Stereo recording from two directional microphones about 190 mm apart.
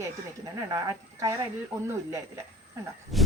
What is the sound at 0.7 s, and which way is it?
Speech, 15° right (ahead or behind).